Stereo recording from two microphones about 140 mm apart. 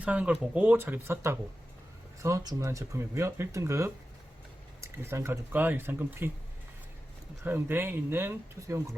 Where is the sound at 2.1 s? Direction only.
20° right (ahead or behind).